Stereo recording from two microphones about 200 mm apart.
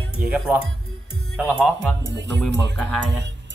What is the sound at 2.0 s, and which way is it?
Speech, 60° right (ahead or behind).